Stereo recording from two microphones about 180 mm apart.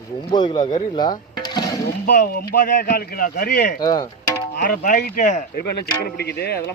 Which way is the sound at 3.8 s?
20° left (ahead or behind).